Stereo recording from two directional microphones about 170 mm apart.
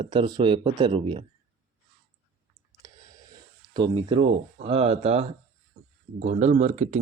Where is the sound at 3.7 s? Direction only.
30° right (ahead or behind).